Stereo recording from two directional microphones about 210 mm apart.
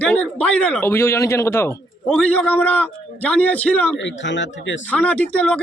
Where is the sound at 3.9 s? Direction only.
60° left (ahead or behind).